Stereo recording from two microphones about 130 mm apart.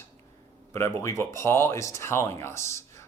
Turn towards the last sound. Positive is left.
turn(degrees=20)  # may be behind; listen again after turning